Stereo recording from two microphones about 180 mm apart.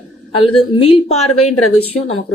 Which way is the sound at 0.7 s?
30° left (ahead or behind).